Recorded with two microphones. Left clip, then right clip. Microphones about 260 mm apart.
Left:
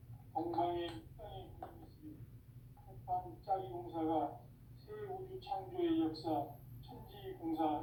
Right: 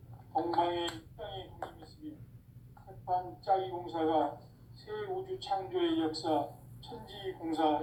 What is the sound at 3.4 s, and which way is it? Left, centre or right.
Speech, right.